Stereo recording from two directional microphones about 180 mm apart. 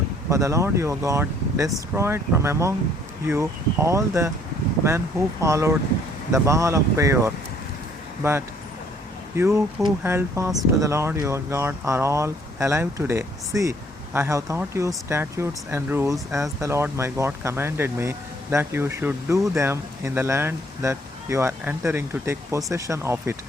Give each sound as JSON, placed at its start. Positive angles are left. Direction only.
{"t": 0.3, "sound": "speech", "side_deg": -15}